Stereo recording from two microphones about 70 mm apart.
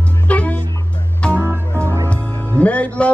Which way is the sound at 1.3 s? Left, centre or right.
Right.